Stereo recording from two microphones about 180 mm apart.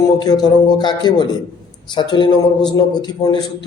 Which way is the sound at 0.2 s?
25° left (ahead or behind).